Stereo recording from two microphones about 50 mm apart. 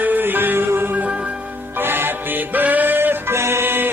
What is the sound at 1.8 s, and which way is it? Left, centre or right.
Music, right.